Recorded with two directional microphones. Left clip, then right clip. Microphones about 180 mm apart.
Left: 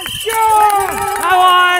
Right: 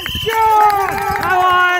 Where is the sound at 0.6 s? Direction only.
30° left (ahead or behind).